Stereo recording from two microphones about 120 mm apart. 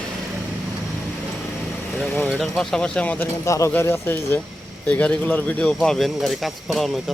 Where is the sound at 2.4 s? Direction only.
5° left (ahead or behind).